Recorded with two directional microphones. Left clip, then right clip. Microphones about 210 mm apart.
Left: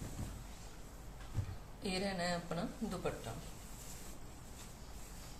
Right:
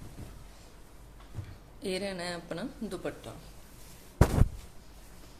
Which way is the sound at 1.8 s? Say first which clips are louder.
Right 4 dB; 50° right (ahead or behind).